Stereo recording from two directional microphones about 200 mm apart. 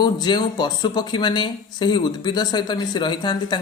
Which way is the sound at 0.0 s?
20° left (ahead or behind).